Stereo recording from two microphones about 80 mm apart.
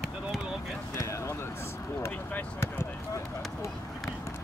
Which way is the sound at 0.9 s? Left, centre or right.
Left.